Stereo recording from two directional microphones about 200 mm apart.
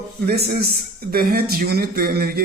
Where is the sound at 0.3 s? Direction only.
50° right (ahead or behind).